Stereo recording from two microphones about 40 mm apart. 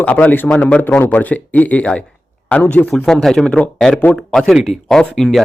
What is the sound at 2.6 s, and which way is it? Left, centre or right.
Speech, left.